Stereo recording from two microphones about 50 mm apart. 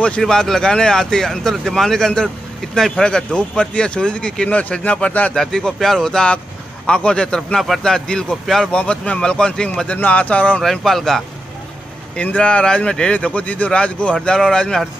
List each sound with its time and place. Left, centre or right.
0.2 s speech: centre
4.5 s speech: left
5.3 s speech: centre
9.9 s speech: left
10.6 s speech: centre
12.2 s speech: left